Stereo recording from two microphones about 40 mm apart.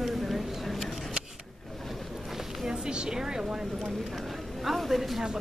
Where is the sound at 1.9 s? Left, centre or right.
Centre.